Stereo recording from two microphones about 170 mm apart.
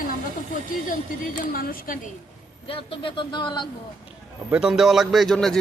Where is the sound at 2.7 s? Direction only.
30° left (ahead or behind).